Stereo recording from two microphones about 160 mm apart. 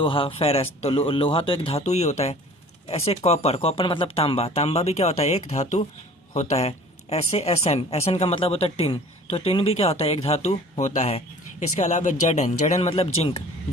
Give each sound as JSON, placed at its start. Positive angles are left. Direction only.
{"t": 0.0, "sound": "a woman's voice", "side_deg": 30}